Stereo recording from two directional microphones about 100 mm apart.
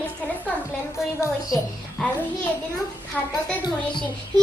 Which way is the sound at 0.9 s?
30° left (ahead or behind).